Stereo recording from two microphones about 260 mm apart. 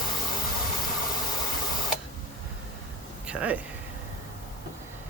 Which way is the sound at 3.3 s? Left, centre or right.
Centre.